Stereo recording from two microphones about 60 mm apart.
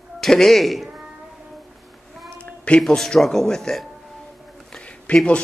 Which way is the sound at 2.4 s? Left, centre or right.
Left.